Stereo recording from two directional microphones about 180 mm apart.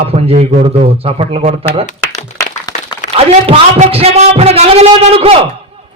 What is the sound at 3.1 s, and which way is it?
Speech, 35° right (ahead or behind).